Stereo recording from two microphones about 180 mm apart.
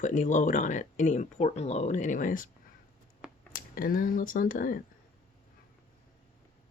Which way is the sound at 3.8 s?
50° left (ahead or behind).